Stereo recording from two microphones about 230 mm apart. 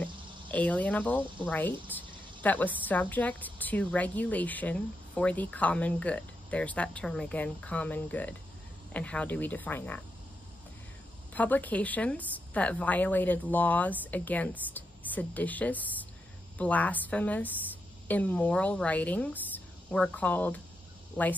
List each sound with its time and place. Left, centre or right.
0.0 s speech: centre
11.3 s speech: centre